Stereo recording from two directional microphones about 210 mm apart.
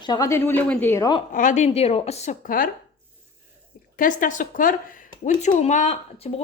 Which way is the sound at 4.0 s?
40° left (ahead or behind).